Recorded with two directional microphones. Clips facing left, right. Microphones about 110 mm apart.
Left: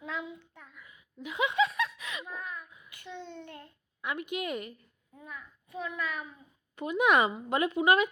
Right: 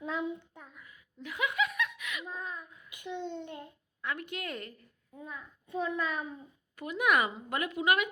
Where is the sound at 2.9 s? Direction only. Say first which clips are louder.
Right 5 dB; 15° right (ahead or behind).